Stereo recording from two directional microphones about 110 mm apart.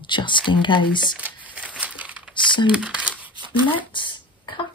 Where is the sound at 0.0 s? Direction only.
45° left (ahead or behind).